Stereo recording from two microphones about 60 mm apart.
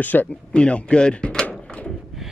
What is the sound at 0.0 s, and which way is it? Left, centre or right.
Speech, left.